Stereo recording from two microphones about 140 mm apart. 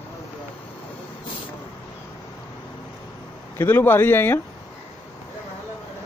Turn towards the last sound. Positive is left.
turn(degrees=15)  # may be behind; listen again after turning